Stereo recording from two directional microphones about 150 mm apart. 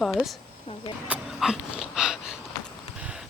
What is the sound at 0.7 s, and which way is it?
Speech, 35° left (ahead or behind).